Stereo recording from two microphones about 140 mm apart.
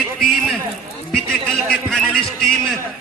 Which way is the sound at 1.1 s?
5° left (ahead or behind).